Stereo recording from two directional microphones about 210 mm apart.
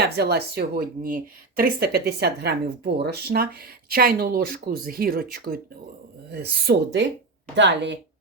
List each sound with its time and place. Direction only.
0.0 s speech: 50° right (ahead or behind)